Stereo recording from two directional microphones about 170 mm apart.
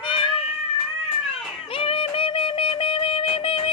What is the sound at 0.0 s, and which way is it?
Cat, 30° left (ahead or behind).